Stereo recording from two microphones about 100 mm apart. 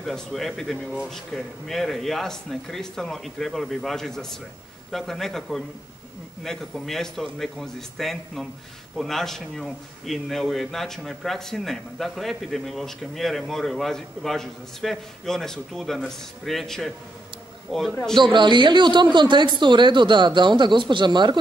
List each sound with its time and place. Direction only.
0.0 s a man's voice: centre (ahead or behind)
18.1 s speech: 50° right (ahead or behind)